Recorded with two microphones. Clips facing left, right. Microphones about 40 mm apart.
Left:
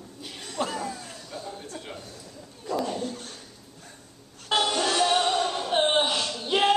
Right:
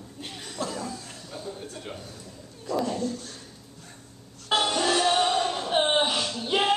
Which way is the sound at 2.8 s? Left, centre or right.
Left.